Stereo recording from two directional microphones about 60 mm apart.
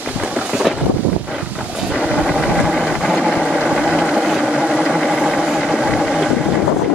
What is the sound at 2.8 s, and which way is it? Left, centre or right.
Vehicle, centre.